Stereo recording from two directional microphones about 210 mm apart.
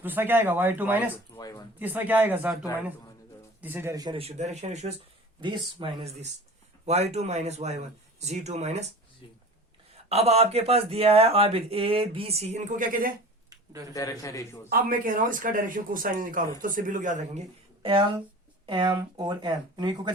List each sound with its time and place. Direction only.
0.0 s speech: 10° right (ahead or behind)
1.1 s a man's voice: 15° left (ahead or behind)
1.8 s speech: 10° right (ahead or behind); by 8.9 s 30° right (ahead or behind)
10.1 s speech: 30° right (ahead or behind)
13.9 s a man's voice: 15° left (ahead or behind)
14.7 s speech: 45° right (ahead or behind)
18.6 s speech: 20° right (ahead or behind)